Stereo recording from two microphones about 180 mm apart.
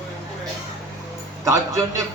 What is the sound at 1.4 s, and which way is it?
Speech, 20° right (ahead or behind).